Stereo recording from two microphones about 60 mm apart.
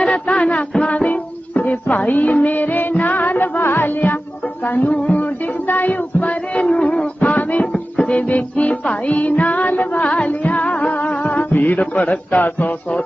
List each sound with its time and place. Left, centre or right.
0.0 s music: centre
7.7 s music: centre
8.3 s music: left